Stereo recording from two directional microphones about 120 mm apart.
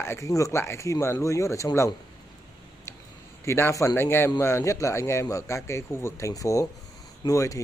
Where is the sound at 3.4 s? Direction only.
20° left (ahead or behind).